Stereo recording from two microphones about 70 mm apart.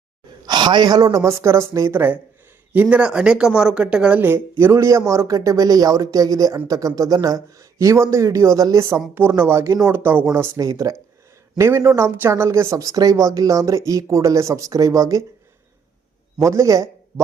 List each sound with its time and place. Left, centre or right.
0.4 s speech: right
1.2 s speech: right
2.9 s speech: centre
4.2 s speech: right
9.1 s speech: right
10.6 s speech: right
12.7 s speech: right
16.4 s speech: right